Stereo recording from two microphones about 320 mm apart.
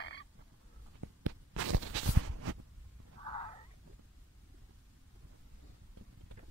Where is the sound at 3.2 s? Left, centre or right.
Centre.